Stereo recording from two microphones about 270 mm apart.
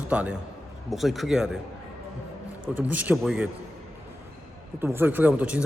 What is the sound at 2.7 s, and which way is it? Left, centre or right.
Speech, centre.